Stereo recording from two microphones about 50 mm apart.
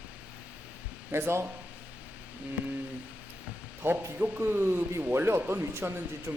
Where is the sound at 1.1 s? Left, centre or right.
Right.